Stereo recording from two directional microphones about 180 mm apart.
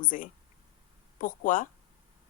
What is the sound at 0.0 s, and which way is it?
A woman's voice, 50° left (ahead or behind).